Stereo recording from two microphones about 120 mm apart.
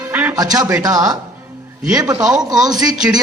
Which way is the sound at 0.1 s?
15° right (ahead or behind).